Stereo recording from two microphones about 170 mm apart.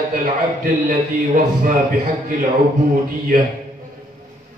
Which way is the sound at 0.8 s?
55° right (ahead or behind).